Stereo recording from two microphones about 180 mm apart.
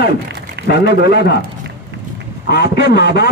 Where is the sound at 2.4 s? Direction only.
65° left (ahead or behind).